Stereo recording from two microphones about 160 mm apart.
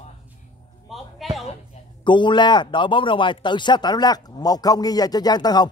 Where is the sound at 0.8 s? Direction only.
Centre (ahead or behind).